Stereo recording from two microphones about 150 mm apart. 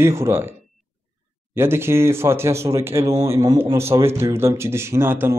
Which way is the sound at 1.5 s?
15° right (ahead or behind).